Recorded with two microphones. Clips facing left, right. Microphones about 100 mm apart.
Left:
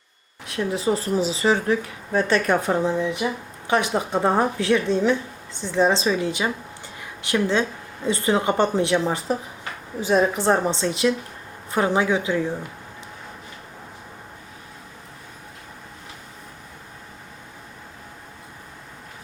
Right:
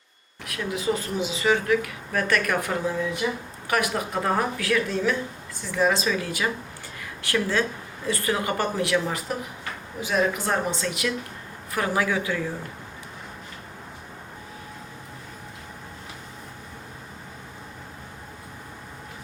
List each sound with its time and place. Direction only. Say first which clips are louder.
0.4 s speech: left 4 dB; 30° left (ahead or behind)
7.0 s a sound: left 3 dB; 20° left (ahead or behind)
8.0 s speech: left 5 dB; 25° left (ahead or behind)